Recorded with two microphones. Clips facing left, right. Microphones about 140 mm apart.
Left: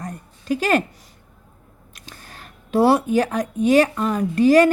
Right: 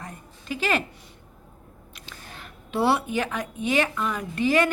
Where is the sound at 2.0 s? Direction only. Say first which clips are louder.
Left 1 dB; 40° left (ahead or behind).